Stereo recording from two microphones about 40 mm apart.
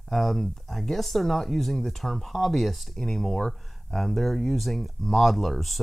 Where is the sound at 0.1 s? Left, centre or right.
Centre.